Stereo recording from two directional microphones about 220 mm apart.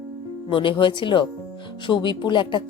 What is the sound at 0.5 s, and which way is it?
Speech, 25° left (ahead or behind).